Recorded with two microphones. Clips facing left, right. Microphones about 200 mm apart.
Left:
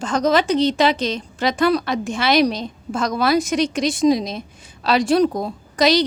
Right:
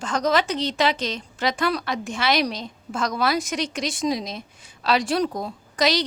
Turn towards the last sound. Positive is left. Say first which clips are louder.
# left 5 dB
turn(degrees=25)  # may be behind; listen again after turning